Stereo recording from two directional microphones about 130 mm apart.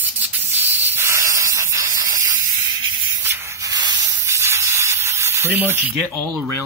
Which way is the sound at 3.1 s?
20° right (ahead or behind).